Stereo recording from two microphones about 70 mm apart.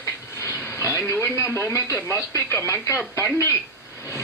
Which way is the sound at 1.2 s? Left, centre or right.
Left.